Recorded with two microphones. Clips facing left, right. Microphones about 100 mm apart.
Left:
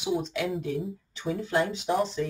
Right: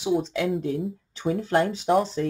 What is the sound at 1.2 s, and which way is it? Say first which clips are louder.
Speech: right 4 dB; 50° right (ahead or behind).